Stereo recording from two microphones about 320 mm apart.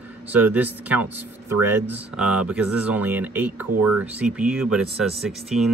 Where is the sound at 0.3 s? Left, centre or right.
Centre.